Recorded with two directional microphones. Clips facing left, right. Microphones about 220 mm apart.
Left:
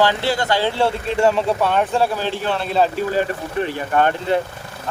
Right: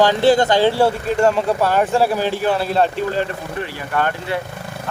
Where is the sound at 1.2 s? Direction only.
Centre (ahead or behind).